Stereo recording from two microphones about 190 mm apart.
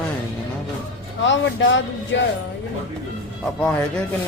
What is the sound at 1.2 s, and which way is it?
Speech, 75° left (ahead or behind).